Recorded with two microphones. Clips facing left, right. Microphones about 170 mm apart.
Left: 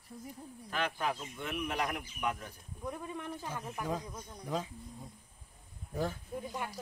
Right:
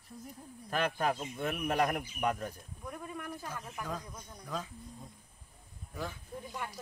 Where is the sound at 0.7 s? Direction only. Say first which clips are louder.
Right 3 dB; 45° right (ahead or behind).